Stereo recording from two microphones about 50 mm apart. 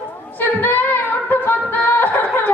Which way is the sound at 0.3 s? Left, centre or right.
Left.